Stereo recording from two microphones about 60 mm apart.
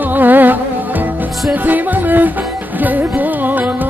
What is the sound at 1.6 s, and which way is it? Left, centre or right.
Music, right.